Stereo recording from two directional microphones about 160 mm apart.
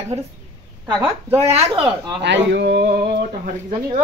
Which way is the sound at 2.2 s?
90° right.